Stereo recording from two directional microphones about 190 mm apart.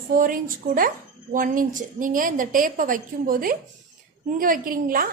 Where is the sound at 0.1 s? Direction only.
45° right (ahead or behind).